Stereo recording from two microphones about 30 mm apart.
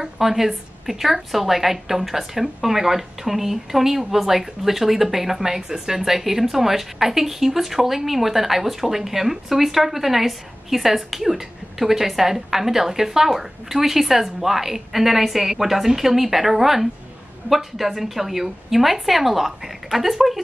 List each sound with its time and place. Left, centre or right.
0.0 s a woman's voice: centre